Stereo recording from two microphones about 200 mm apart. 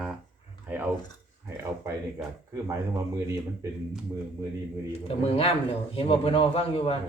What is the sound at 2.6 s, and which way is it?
Speech, 15° right (ahead or behind).